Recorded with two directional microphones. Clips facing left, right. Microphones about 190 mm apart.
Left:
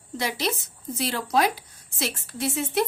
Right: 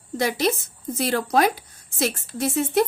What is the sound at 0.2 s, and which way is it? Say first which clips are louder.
A woman's voice: right 6 dB; 50° right (ahead or behind).